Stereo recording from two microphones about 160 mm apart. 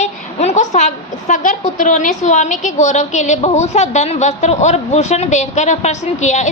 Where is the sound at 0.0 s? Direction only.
45° left (ahead or behind).